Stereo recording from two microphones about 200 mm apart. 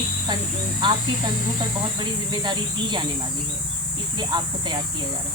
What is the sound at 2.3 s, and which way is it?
Speech, 20° right (ahead or behind).